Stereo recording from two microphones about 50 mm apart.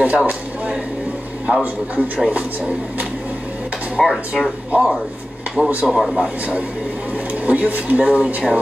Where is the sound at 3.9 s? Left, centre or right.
Centre.